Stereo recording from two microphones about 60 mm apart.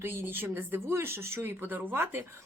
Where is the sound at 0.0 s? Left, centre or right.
Right.